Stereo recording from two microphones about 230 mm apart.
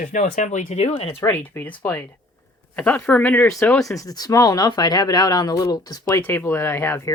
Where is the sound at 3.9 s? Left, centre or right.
Centre.